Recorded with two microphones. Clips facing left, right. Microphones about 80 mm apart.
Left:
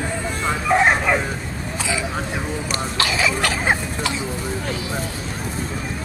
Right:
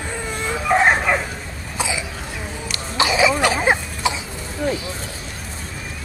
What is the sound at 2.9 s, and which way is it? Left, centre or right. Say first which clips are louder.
Cough: right 6 dB; centre.